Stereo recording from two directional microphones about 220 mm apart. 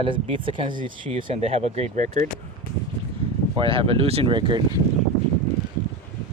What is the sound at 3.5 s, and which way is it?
Speech, 25° right (ahead or behind).